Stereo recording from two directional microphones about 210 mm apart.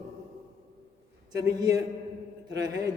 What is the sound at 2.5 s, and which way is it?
Speech, 20° right (ahead or behind).